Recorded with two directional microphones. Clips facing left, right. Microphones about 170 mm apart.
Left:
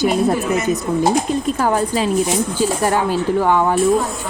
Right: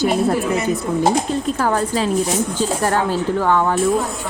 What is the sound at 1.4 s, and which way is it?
Speech, 15° left (ahead or behind).